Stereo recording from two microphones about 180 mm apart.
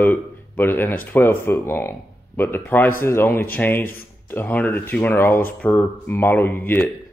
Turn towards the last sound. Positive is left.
turn(degrees=10)  # may be behind; listen again after turning